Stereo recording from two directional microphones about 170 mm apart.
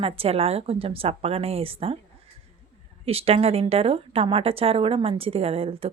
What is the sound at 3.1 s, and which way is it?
A woman's voice, 35° right (ahead or behind).